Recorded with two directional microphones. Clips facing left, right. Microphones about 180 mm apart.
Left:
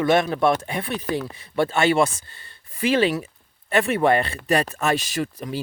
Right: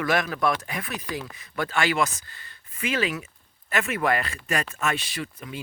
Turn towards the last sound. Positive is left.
turn(degrees=40)  # may be behind; listen again after turning